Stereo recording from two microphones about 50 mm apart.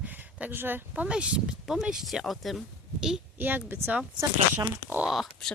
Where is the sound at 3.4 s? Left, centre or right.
Right.